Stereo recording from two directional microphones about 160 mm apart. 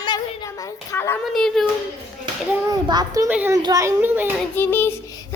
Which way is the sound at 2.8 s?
25° right (ahead or behind).